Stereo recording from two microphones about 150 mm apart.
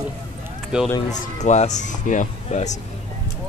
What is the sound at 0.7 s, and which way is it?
Speech, 5° right (ahead or behind).